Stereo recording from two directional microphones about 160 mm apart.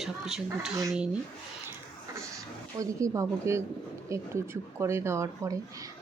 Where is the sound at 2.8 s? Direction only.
20° right (ahead or behind).